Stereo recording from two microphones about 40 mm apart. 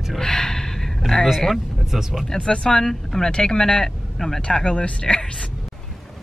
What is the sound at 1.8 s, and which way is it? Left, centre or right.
Speech, centre.